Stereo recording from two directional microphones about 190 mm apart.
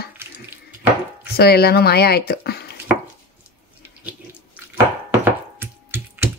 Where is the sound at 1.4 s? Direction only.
55° left (ahead or behind).